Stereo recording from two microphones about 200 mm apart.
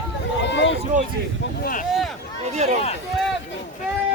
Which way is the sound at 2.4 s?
35° right (ahead or behind).